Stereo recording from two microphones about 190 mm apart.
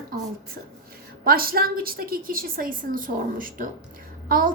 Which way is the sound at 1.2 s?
50° right (ahead or behind).